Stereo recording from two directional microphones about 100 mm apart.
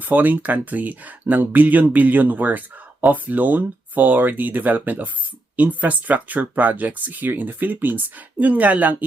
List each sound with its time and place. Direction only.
0.0 s speech: 15° right (ahead or behind)